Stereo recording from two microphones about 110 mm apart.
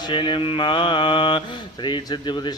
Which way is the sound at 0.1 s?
50° left (ahead or behind).